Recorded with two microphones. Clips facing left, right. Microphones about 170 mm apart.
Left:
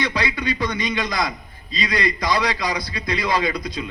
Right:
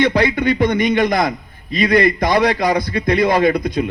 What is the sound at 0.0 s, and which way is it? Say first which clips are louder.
A man's voice: right 9 dB; 55° right (ahead or behind).